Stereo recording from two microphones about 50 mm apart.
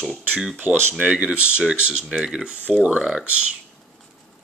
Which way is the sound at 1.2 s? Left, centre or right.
Right.